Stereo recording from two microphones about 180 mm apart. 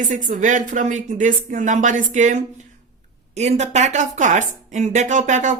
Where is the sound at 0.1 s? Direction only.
45° right (ahead or behind).